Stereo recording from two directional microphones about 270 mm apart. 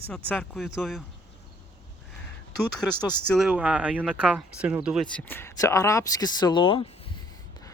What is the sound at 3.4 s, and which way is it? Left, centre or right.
Speech, centre.